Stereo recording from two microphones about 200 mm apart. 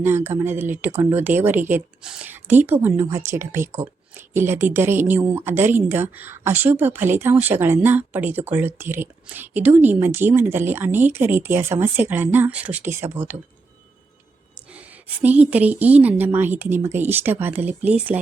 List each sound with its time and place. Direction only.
0.0 s speech: 10° right (ahead or behind)
14.7 s speech: 5° right (ahead or behind)